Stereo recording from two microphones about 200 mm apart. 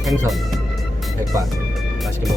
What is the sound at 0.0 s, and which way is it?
Speech, centre (ahead or behind).